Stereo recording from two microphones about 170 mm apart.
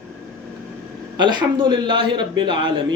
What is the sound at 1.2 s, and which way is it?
Speech, 25° right (ahead or behind).